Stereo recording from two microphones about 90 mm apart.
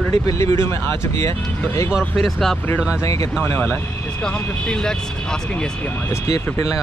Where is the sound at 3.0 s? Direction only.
35° left (ahead or behind).